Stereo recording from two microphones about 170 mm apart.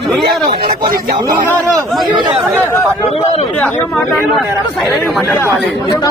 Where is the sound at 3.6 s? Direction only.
5° left (ahead or behind).